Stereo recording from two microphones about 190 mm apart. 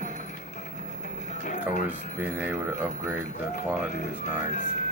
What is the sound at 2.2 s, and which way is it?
Speech, 10° right (ahead or behind).